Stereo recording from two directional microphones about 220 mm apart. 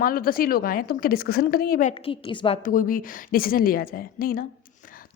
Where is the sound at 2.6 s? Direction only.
40° left (ahead or behind).